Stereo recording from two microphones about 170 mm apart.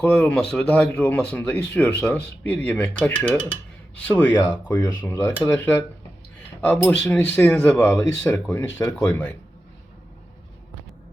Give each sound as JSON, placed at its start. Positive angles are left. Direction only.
{"t": 0.0, "sound": "speech", "side_deg": 5}